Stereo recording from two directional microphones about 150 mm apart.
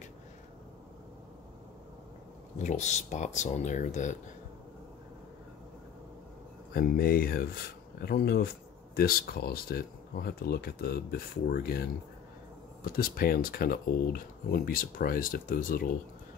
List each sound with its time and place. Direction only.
2.6 s speech: 50° left (ahead or behind)
6.7 s speech: 85° left
12.8 s speech: 80° left